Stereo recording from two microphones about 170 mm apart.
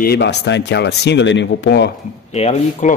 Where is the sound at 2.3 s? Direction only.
40° left (ahead or behind).